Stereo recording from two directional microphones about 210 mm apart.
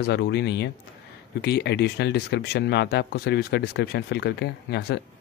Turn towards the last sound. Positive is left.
turn(degrees=50)  # may be behind; listen again after turning